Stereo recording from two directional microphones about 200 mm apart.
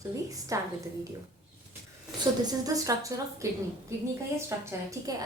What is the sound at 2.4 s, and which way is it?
A woman's voice, 20° right (ahead or behind).